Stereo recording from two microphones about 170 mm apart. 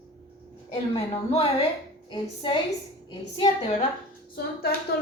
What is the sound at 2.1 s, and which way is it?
Speech, 30° left (ahead or behind).